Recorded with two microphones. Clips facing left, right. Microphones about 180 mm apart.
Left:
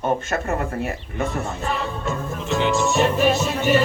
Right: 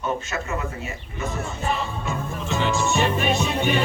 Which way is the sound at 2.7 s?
Centre (ahead or behind).